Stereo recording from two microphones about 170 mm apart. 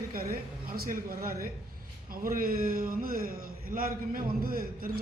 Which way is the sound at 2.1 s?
55° right (ahead or behind).